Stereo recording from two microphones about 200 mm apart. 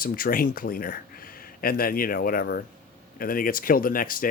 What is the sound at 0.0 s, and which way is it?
Speech, 45° left (ahead or behind).